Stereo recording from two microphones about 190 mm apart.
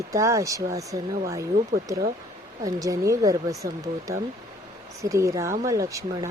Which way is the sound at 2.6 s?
15° right (ahead or behind).